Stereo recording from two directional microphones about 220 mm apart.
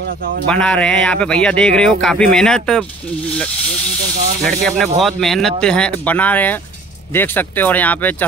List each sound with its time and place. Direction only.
0.5 s speech: 5° left (ahead or behind)
4.4 s speech: centre (ahead or behind)